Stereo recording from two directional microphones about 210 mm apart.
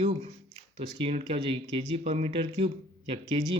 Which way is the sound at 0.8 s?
25° right (ahead or behind).